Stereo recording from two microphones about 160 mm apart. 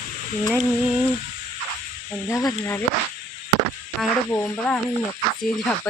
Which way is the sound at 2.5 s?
15° left (ahead or behind).